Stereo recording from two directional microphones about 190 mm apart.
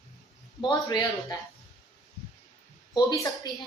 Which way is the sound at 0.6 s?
20° left (ahead or behind).